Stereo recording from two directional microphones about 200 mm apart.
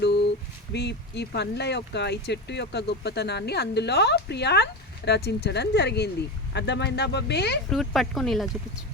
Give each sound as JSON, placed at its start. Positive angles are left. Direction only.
{"t": 0.0, "sound": "a sound", "side_deg": 55}
{"t": 0.7, "sound": "speech", "side_deg": 60}
{"t": 7.7, "sound": "speech", "side_deg": 0}